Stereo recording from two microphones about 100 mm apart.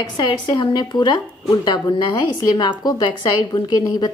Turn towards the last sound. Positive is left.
turn(degrees=45)  # may be behind; listen again after turning